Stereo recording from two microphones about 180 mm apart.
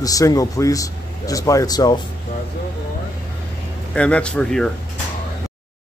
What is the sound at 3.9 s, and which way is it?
Speech, 5° left (ahead or behind).